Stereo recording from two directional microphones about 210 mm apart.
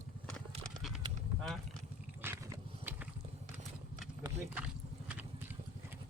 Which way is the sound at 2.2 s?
10° right (ahead or behind).